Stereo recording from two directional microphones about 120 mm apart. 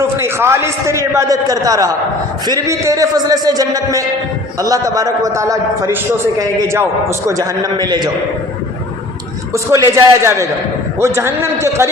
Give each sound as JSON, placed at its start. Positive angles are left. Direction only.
{"t": 0.2, "sound": "a man's voice", "side_deg": -20}
{"t": 9.5, "sound": "a man's voice", "side_deg": -25}